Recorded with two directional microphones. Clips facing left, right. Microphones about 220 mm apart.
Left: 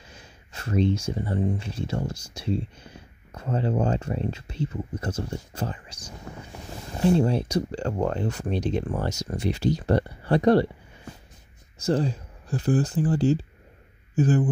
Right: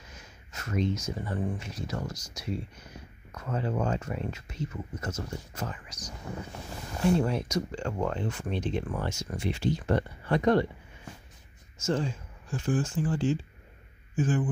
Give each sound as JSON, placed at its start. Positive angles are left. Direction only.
{"t": 0.1, "sound": "speech", "side_deg": 30}
{"t": 11.8, "sound": "speech", "side_deg": 35}